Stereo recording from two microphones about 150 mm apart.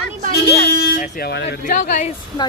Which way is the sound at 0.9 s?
65° left (ahead or behind).